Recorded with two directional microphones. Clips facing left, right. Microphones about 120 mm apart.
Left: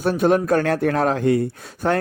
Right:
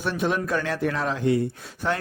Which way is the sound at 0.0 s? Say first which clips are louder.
Left 8 dB; 45° left (ahead or behind).